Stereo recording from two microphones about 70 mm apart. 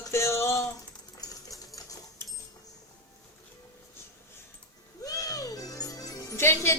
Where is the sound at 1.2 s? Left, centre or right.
Left.